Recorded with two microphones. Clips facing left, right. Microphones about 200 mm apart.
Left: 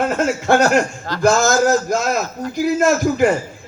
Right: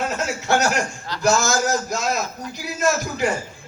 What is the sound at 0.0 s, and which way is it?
A man's voice, 50° left (ahead or behind).